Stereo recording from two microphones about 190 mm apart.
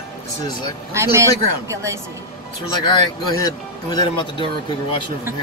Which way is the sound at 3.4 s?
20° left (ahead or behind).